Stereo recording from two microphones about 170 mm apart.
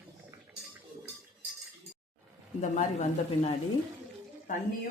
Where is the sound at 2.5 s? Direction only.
45° left (ahead or behind).